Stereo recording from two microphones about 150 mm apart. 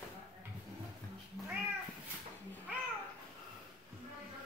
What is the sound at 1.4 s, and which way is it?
Cat, 5° left (ahead or behind).